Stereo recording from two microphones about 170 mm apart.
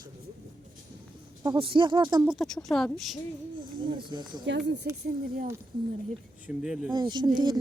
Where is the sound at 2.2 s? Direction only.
5° right (ahead or behind).